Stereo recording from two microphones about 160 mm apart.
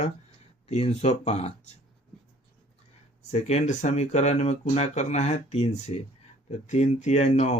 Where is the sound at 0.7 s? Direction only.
45° left (ahead or behind).